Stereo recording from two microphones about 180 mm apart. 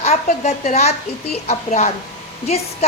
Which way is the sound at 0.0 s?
40° left (ahead or behind).